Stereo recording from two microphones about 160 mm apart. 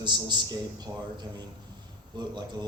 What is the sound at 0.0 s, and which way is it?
A man's voice, 25° right (ahead or behind).